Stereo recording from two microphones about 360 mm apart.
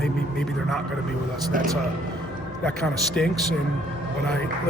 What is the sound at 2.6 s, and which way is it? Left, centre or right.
Speech, centre.